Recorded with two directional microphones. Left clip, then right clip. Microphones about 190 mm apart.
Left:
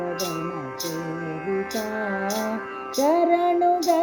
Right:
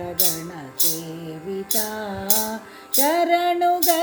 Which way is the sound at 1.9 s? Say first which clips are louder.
Left 3 dB; 55° right (ahead or behind).